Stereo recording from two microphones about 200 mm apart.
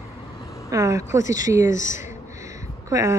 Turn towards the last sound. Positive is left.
turn(degrees=-15)  # may be behind; listen again after turning